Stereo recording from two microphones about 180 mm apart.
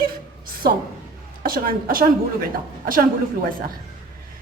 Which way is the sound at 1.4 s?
55° right (ahead or behind).